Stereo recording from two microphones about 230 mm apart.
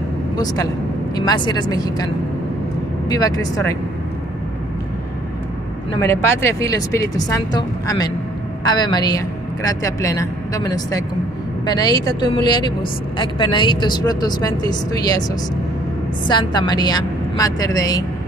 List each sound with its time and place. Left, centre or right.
1.1 s a woman's voice: centre
3.1 s a woman's voice: centre
5.9 s a woman's voice: centre
16.3 s a woman's voice: centre